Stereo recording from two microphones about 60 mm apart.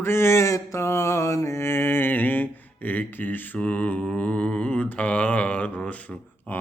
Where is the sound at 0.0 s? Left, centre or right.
Left.